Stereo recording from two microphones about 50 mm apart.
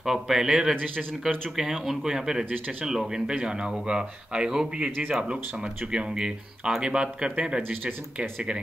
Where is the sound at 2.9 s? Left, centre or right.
Centre.